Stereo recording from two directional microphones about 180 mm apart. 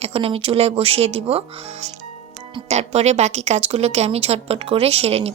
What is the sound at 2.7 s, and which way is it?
A woman's voice, 40° right (ahead or behind).